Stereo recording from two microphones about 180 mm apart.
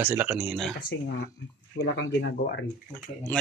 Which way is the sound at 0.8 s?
65° left (ahead or behind).